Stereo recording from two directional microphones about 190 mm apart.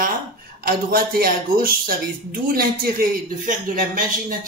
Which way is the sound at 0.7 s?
55° right (ahead or behind).